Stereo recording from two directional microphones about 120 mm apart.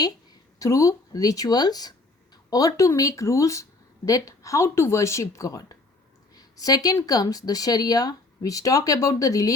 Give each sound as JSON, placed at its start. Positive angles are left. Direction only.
{"t": 0.6, "sound": "speech", "side_deg": 25}